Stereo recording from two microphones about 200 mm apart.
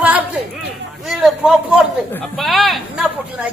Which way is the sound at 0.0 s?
5° right (ahead or behind).